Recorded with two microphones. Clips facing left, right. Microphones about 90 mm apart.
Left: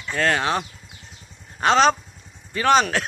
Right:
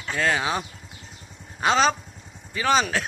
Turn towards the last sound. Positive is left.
turn(degrees=0)  # may be behind; listen again after turning